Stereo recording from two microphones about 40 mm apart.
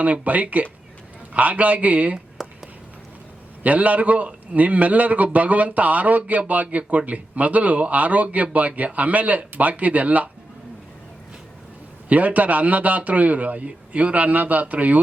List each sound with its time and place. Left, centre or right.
0.0 s speech: right
2.4 s a sound: centre
3.6 s speech: right
12.0 s speech: right